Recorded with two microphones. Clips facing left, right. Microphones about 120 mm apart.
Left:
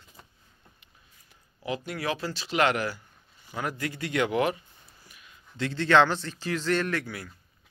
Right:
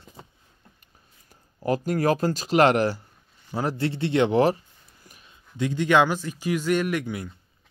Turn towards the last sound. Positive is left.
turn(degrees=-20)  # may be behind; listen again after turning